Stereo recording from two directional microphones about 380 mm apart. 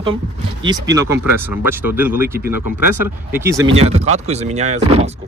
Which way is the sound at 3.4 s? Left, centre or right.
Centre.